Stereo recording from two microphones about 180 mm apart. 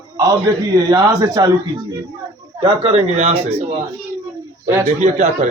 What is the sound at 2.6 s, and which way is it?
Speech, 35° right (ahead or behind).